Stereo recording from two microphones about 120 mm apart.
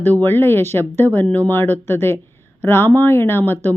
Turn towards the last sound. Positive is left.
turn(degrees=15)  # may be behind; listen again after turning